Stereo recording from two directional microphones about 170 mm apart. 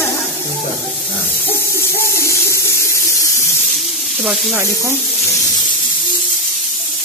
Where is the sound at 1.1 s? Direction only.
15° left (ahead or behind).